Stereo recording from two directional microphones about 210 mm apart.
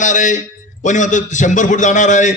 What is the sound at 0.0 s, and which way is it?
A man's voice, 35° left (ahead or behind).